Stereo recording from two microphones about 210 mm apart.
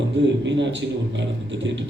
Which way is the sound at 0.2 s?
60° right (ahead or behind).